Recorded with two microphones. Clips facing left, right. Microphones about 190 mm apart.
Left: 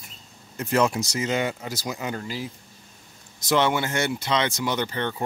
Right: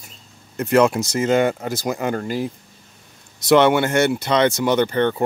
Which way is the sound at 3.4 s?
60° right (ahead or behind).